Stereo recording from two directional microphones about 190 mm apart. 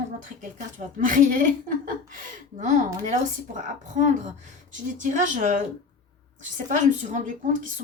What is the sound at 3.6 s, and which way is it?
Speech, 40° right (ahead or behind).